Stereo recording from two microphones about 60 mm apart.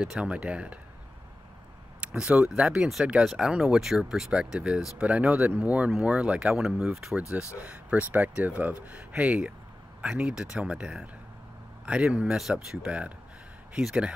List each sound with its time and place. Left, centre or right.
0.2 s speech: centre
2.0 s speech: centre
4.3 s speech: centre
6.5 s speech: centre
7.7 s speech: right
9.2 s speech: centre
12.4 s speech: centre
12.8 s speech: right
13.7 s speech: centre